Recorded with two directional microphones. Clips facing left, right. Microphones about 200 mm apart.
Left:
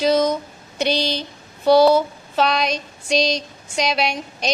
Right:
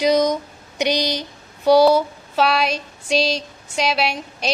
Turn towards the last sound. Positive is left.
turn(degrees=-5)  # may be behind; listen again after turning